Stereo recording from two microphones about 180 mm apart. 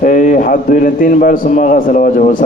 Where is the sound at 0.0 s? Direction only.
50° left (ahead or behind).